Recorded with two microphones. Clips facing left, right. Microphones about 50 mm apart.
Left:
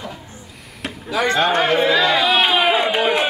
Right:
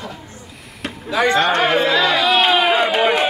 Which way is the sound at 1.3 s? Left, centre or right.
Centre.